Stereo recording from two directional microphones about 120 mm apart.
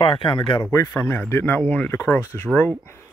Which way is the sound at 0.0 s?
45° left (ahead or behind).